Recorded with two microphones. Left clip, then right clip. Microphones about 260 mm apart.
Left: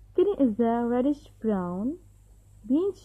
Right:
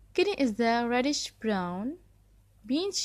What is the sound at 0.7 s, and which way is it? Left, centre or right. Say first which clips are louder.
A woman's voice: left 1 dB; right.